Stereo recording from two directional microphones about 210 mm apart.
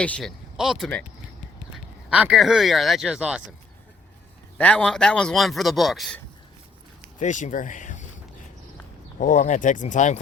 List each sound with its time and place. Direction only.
0.0 s speech: 5° left (ahead or behind)
4.5 s speech: 5° left (ahead or behind)
7.2 s speech: 35° left (ahead or behind)
9.1 s speech: 40° left (ahead or behind)